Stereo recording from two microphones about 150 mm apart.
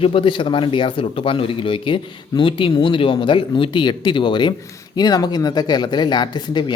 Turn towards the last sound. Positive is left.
turn(degrees=30)  # may be behind; listen again after turning